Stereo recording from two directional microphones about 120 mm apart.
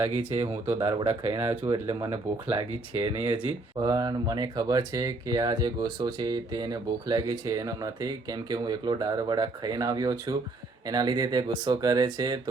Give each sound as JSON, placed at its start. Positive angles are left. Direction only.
{"t": 0.8, "sound": "speech", "side_deg": -55}
{"t": 1.4, "sound": "speech", "side_deg": -25}
{"t": 2.0, "sound": "speech", "side_deg": -45}